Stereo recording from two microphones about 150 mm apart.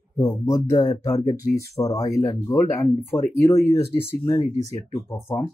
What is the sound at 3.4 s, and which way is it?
Speech, 20° left (ahead or behind).